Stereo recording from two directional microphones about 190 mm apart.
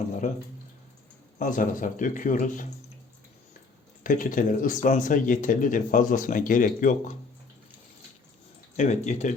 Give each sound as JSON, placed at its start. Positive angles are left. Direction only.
{"t": 1.4, "sound": "speech", "side_deg": 45}
{"t": 4.0, "sound": "speech", "side_deg": 45}
{"t": 8.7, "sound": "speech", "side_deg": 40}